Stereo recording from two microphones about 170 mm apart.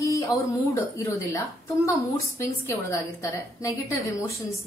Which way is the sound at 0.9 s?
20° left (ahead or behind).